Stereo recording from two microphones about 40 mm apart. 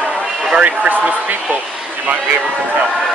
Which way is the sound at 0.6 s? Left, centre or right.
Right.